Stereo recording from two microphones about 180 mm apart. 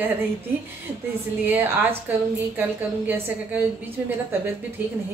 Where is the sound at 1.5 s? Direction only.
10° right (ahead or behind).